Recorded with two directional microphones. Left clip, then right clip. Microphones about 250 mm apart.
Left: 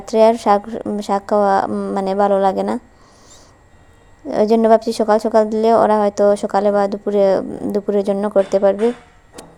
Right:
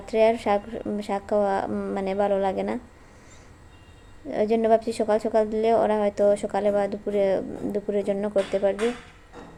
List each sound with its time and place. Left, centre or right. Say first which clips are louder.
0.0 s a woman's voice: left 8 dB; left
4.3 s a woman's voice: left 8 dB; left